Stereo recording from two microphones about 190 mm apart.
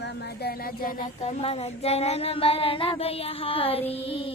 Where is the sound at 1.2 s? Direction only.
35° left (ahead or behind).